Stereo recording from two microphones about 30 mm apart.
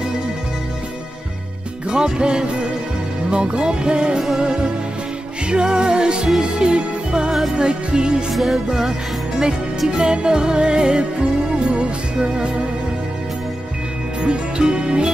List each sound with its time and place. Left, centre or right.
2.0 s music: right
5.5 s music: right
8.4 s music: centre
9.8 s music: right
14.2 s music: right